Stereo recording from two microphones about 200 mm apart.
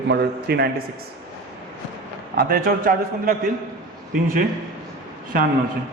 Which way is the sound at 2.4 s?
45° right (ahead or behind).